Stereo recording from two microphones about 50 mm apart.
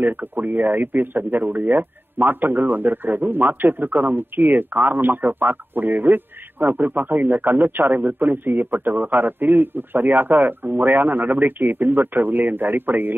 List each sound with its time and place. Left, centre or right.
0.0 s speech: right